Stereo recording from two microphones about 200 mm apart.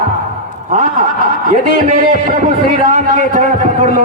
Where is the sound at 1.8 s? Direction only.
40° right (ahead or behind).